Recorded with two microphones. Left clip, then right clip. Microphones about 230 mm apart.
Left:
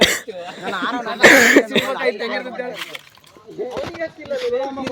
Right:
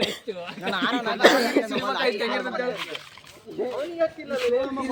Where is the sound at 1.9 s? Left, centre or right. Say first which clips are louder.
Left 4 dB; centre.